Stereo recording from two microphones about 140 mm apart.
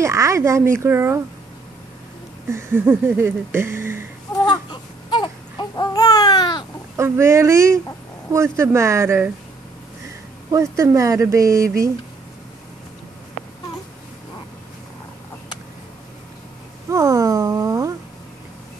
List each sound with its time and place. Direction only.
0.0 s speech: 20° right (ahead or behind)
2.5 s speech: 15° right (ahead or behind)
4.5 s baby cry: 35° left (ahead or behind)
7.0 s speech: 20° right (ahead or behind)
10.5 s speech: 20° right (ahead or behind)
16.9 s a sound: 20° right (ahead or behind)